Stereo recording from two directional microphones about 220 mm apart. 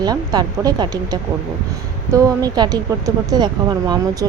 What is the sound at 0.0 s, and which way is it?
Speech, 20° right (ahead or behind).